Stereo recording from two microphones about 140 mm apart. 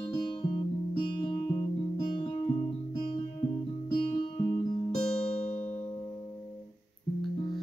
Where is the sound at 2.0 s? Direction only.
35° left (ahead or behind).